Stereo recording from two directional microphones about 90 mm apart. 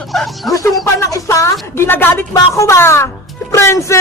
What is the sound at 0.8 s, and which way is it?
Speech, 35° left (ahead or behind).